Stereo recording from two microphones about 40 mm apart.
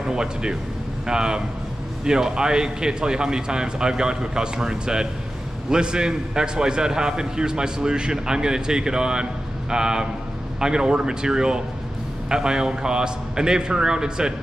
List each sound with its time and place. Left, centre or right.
0.0 s a man's voice: centre